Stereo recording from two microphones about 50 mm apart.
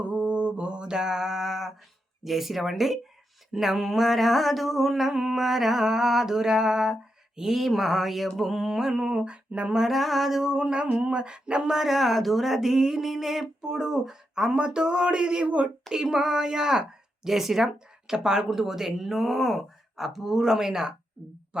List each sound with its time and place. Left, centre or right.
0.0 s mantra: right; by 1.7 s centre
2.2 s a sound: centre
8.4 s speech: centre; by 9.7 s right
9.7 s speech: centre; by 15.7 s right
15.9 s speech: centre